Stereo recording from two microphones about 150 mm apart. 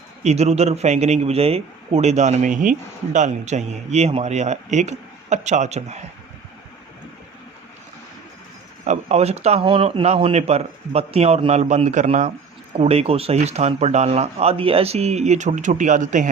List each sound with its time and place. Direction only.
0.2 s a man's voice: 45° right (ahead or behind)
8.8 s a man's voice: 50° right (ahead or behind)